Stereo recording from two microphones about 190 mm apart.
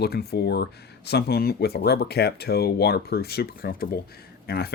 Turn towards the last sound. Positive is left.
turn(degrees=55)  # may be behind; listen again after turning